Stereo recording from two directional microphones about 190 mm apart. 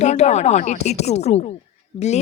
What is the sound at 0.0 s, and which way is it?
A woman's voice, 35° left (ahead or behind).